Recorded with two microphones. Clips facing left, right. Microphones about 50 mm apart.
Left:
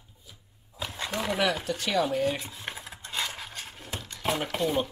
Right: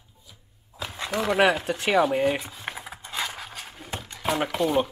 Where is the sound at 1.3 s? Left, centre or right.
Right.